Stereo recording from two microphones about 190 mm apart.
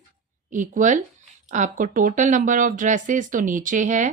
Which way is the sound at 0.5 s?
40° right (ahead or behind).